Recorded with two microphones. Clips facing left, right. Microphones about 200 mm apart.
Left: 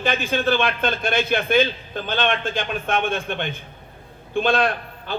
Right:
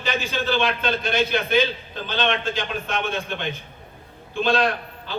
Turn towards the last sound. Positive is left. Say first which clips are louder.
# left 2 dB
turn(degrees=55)  # may be behind; listen again after turning